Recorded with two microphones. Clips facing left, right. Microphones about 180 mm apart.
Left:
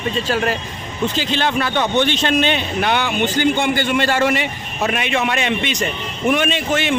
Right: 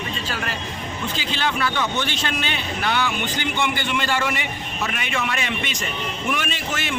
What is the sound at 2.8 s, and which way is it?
A man's voice, 55° left (ahead or behind).